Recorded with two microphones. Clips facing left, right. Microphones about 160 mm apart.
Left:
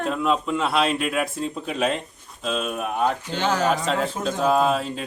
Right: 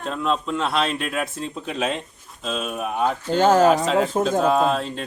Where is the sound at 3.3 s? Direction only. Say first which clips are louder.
Right 11 dB; 45° right (ahead or behind).